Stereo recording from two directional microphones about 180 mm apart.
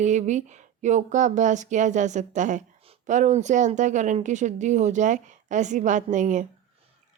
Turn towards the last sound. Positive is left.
turn(degrees=-45)  # may be behind; listen again after turning